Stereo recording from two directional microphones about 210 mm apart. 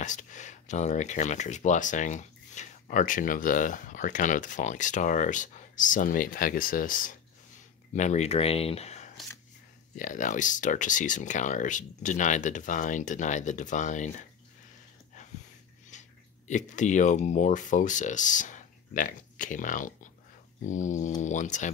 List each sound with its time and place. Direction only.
0.0 s speech: 35° left (ahead or behind)
15.9 s speech: 35° left (ahead or behind)